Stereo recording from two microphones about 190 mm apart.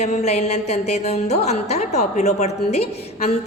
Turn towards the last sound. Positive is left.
turn(degrees=35)  # may be behind; listen again after turning